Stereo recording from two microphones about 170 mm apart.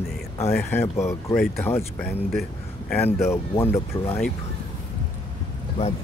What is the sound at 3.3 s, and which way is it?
Speech, 15° left (ahead or behind).